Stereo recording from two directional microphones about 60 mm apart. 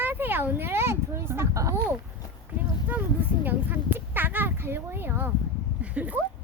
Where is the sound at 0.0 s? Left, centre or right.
Right.